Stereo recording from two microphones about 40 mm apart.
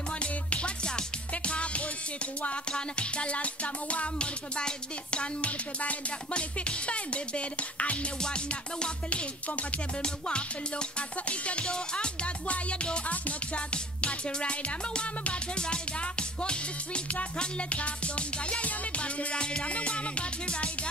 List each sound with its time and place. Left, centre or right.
0.2 s music: left
8.2 s music: left
9.5 s music: left
10.0 s music: left
13.1 s music: left
13.6 s music: left